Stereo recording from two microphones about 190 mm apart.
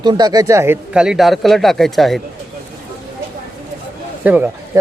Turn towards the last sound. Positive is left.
turn(degrees=-10)  # may be behind; listen again after turning